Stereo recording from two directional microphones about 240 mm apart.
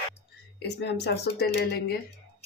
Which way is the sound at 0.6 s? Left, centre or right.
Left.